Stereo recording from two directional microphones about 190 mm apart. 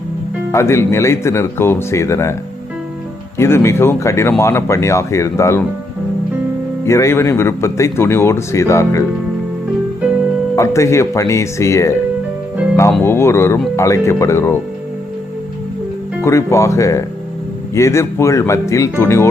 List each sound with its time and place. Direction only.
0.5 s speech: 15° left (ahead or behind)
3.3 s speech: 15° left (ahead or behind)
6.8 s speech: 15° left (ahead or behind)
10.5 s speech: 15° left (ahead or behind)
13.1 s speech: 15° left (ahead or behind)
16.2 s speech: 15° left (ahead or behind)